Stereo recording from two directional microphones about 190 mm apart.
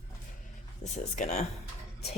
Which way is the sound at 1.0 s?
35° left (ahead or behind).